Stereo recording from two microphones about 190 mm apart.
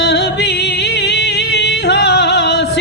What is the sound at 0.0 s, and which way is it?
Music, 65° left (ahead or behind).